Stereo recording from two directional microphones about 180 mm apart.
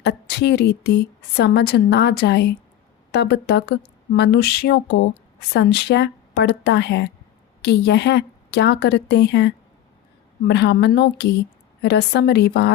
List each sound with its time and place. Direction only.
0.0 s a woman's voice: 70° left (ahead or behind)